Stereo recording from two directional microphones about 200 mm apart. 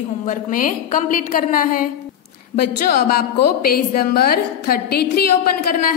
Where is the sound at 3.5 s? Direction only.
50° left (ahead or behind).